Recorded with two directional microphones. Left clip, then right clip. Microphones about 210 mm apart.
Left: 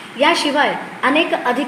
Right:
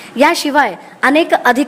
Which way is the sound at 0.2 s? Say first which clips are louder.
Right 3 dB; 50° right (ahead or behind).